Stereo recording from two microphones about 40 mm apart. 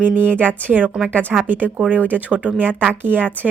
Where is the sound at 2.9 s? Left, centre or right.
Right.